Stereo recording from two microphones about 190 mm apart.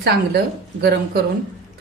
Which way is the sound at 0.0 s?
60° right (ahead or behind).